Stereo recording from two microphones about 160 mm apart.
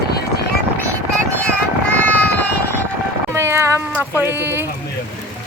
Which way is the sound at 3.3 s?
15° right (ahead or behind).